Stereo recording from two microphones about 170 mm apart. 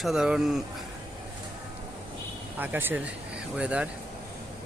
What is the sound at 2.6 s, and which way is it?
Speech, 10° right (ahead or behind).